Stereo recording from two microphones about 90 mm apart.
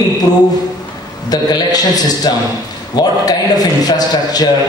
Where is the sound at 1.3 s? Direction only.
45° left (ahead or behind).